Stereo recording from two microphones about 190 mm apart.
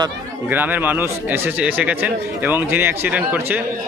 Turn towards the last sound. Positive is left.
turn(degrees=-10)  # may be behind; listen again after turning